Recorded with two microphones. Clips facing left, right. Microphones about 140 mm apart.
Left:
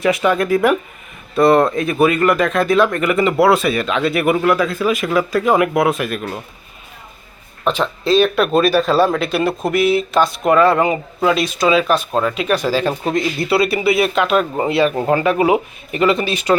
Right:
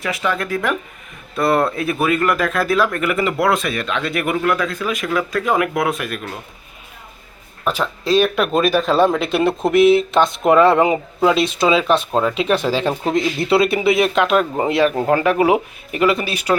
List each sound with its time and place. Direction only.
0.0 s speech: 20° left (ahead or behind)
1.4 s speech: centre (ahead or behind)
7.7 s speech: 10° right (ahead or behind)
10.4 s speech: centre (ahead or behind)
11.3 s speech: 25° right (ahead or behind)
13.7 s speech: 5° left (ahead or behind)
14.2 s speech: 15° right (ahead or behind)
14.9 s speech: 5° left (ahead or behind)
15.5 s speech: 10° right (ahead or behind)